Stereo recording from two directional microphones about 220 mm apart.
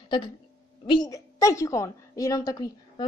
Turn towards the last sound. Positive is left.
turn(degrees=15)  # may be behind; listen again after turning